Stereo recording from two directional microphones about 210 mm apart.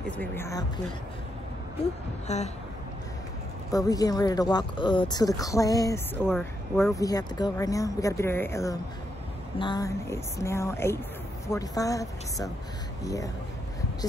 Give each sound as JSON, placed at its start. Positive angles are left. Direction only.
{"t": 0.0, "sound": "speech", "side_deg": 10}
{"t": 2.2, "sound": "speech", "side_deg": 30}
{"t": 3.7, "sound": "speech", "side_deg": 15}
{"t": 6.1, "sound": "speech", "side_deg": -5}
{"t": 6.7, "sound": "speech", "side_deg": 15}